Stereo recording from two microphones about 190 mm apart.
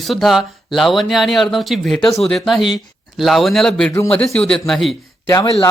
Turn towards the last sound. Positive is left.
turn(degrees=15)  # may be behind; listen again after turning